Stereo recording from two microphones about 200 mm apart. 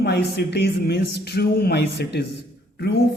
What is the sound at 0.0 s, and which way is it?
Speech, 55° left (ahead or behind).